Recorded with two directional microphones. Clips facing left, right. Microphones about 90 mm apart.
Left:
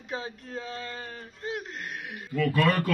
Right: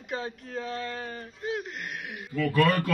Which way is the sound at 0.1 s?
Centre (ahead or behind).